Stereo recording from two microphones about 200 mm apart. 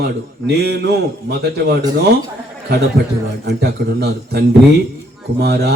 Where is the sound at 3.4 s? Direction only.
55° right (ahead or behind).